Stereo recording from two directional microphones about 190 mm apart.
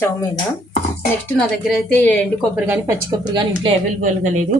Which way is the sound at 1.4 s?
Centre (ahead or behind).